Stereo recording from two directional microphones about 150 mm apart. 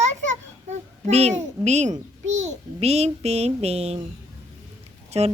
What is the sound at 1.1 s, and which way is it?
A child's voice, 45° right (ahead or behind).